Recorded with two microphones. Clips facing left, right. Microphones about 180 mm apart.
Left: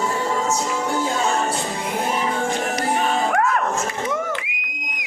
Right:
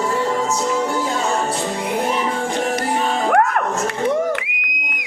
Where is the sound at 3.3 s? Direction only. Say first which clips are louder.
Right 6 dB; 55° right (ahead or behind).